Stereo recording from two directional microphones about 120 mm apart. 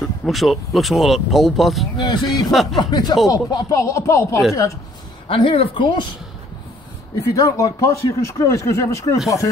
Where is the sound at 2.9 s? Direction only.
35° left (ahead or behind).